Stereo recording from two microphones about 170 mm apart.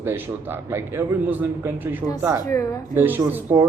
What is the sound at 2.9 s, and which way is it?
Speech, 10° right (ahead or behind).